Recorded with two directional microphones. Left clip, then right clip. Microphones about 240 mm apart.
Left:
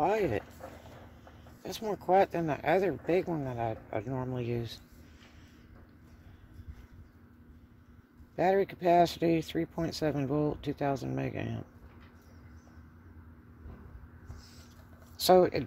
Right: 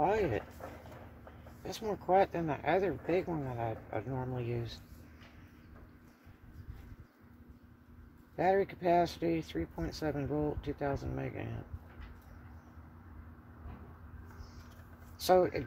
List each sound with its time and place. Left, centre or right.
0.0 s speech: left
1.6 s speech: left
8.4 s speech: left
15.1 s speech: left